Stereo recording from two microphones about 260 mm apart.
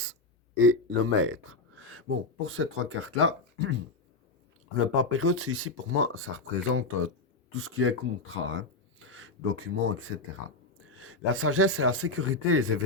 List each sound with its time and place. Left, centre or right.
0.6 s speech: right
4.9 s speech: right